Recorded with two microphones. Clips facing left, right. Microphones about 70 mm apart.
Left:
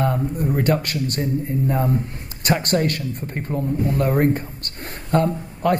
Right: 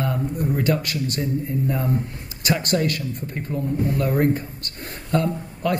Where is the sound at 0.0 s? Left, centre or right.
Left.